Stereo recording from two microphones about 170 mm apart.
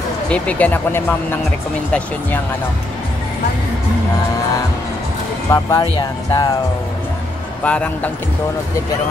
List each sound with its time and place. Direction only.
0.3 s speech: 10° left (ahead or behind)
5.5 s speech: 20° left (ahead or behind)
7.6 s speech: 10° left (ahead or behind)